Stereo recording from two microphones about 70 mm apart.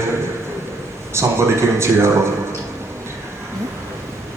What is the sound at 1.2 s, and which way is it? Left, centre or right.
Speech, right.